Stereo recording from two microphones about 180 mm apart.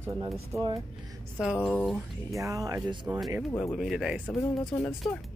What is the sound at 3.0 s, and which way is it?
Speech, centre (ahead or behind).